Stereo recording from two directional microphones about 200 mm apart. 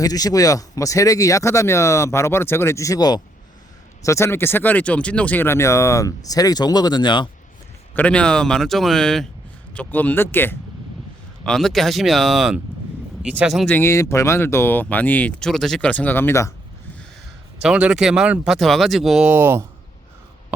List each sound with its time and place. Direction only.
0.0 s speech: 20° left (ahead or behind)
7.9 s speech: 5° left (ahead or behind)
13.7 s speech: 15° left (ahead or behind)
17.6 s speech: 5° right (ahead or behind)